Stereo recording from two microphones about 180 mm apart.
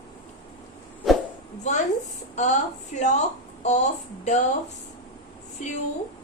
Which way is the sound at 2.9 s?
45° left (ahead or behind).